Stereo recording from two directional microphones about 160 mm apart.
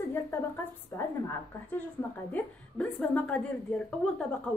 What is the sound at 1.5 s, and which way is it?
A woman's voice, 10° left (ahead or behind).